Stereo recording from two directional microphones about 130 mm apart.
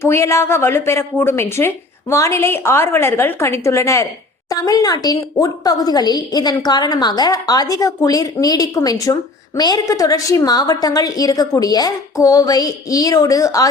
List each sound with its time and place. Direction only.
0.0 s a woman's voice: 20° left (ahead or behind)